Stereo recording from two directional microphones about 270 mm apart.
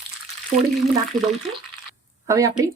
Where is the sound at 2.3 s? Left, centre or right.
Centre.